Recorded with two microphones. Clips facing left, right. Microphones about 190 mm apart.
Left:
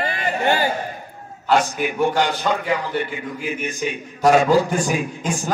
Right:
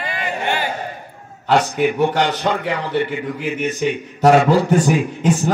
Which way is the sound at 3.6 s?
70° right (ahead or behind).